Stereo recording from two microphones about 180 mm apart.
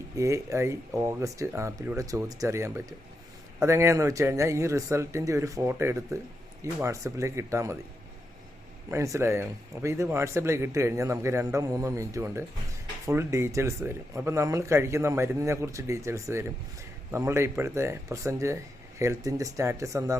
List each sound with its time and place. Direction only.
0.2 s speech: 15° right (ahead or behind)
8.9 s speech: 15° right (ahead or behind)